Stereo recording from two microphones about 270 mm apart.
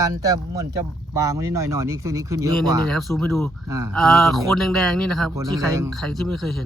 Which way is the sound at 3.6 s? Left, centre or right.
Centre.